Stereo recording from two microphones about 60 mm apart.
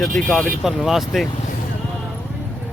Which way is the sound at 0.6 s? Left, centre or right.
Centre.